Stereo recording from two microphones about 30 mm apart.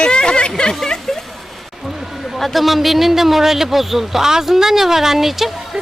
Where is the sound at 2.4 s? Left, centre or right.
Centre.